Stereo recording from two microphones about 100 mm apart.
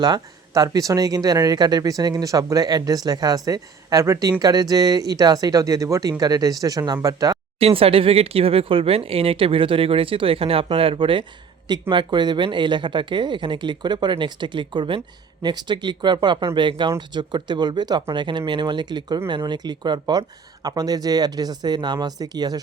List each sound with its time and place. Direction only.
0.0 s speech: 40° right (ahead or behind)
7.6 s speech: 70° right (ahead or behind); by 22.6 s 40° right (ahead or behind)